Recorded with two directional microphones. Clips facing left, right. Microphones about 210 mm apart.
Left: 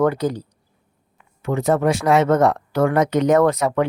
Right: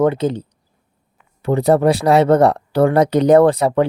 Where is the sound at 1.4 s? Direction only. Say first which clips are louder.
Right 5 dB; 35° right (ahead or behind).